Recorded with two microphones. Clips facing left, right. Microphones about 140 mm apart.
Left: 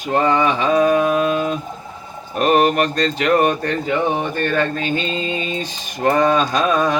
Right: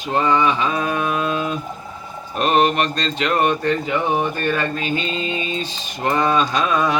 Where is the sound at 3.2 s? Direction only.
45° left (ahead or behind).